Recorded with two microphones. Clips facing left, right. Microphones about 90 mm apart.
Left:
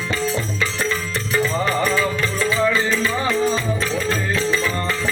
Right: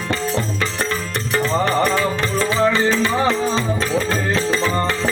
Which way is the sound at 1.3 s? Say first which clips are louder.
Right 2 dB; 60° right (ahead or behind).